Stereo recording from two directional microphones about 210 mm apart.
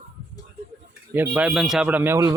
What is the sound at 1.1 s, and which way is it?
A man's voice, 5° right (ahead or behind).